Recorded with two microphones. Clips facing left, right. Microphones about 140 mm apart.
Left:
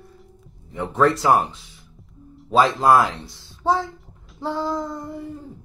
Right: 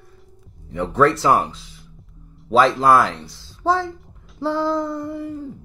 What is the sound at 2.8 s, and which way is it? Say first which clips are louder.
Speech: right 1 dB; 20° left (ahead or behind).